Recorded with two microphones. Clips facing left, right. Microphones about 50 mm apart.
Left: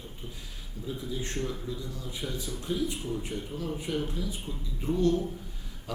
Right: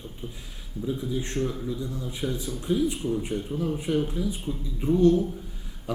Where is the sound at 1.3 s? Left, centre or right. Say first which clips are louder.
Right 5 dB; centre.